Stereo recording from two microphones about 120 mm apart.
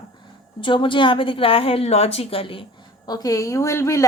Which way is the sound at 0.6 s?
45° left (ahead or behind).